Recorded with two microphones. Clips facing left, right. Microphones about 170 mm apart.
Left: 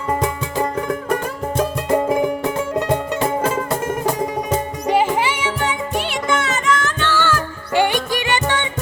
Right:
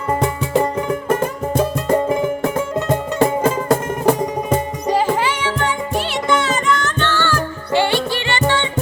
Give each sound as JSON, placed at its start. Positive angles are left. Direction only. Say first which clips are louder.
{"t": 0.6, "sound": "music", "louder": "right 2 dB", "side_deg": -10}
{"t": 4.9, "sound": "music", "louder": "even", "side_deg": 15}
{"t": 7.7, "sound": "music", "louder": "even", "side_deg": 15}